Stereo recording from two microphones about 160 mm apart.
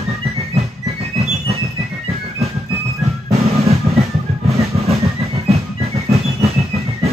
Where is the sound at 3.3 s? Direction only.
40° right (ahead or behind).